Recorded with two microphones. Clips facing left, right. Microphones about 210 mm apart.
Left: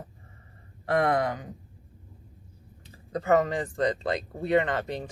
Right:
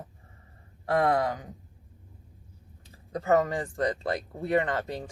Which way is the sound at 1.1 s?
60° left (ahead or behind).